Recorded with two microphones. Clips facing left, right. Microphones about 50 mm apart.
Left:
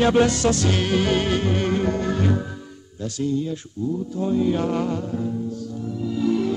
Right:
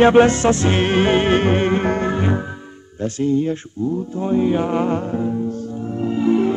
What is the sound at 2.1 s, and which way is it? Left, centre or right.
Music, right.